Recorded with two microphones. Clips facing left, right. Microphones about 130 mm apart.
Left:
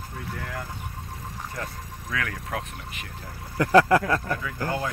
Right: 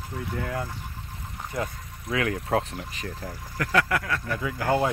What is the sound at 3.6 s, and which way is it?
Speech, 30° left (ahead or behind).